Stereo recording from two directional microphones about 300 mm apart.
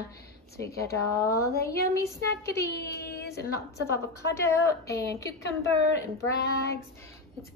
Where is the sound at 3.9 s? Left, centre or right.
Centre.